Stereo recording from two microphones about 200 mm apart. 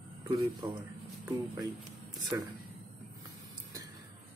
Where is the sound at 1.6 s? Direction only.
20° right (ahead or behind).